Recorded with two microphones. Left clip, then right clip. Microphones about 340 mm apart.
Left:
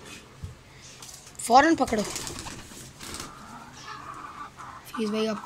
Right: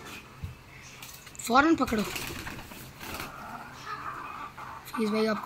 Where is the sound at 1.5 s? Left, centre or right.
Centre.